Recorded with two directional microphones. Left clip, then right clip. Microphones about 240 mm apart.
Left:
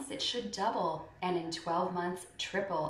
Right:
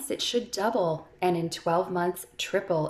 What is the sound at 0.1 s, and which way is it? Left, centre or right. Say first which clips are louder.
Speech: right 8 dB; right.